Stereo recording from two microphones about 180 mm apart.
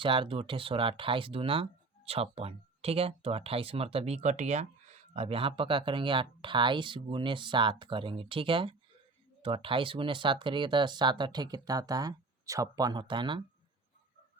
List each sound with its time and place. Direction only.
0.0 s speech: 30° right (ahead or behind)